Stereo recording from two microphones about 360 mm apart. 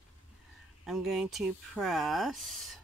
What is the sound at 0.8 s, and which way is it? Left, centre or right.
Speech, centre.